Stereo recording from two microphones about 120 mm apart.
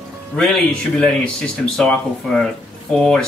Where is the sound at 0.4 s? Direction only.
5° left (ahead or behind).